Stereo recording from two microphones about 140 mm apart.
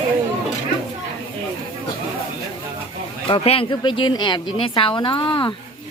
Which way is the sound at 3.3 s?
40° left (ahead or behind).